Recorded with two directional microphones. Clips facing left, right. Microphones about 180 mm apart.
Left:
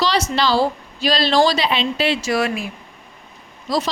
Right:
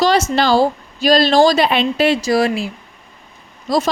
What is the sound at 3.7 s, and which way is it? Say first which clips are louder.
Speech: right 4 dB; 50° right (ahead or behind).